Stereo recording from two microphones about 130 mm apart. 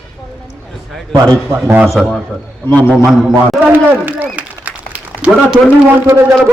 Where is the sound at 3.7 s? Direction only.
15° right (ahead or behind).